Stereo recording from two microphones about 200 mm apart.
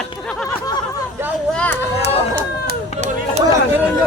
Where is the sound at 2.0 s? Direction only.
60° right (ahead or behind).